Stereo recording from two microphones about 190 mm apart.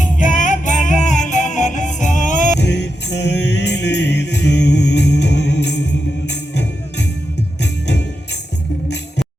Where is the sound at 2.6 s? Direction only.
65° left (ahead or behind).